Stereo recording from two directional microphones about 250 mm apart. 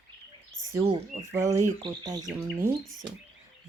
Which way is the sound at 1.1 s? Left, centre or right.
Centre.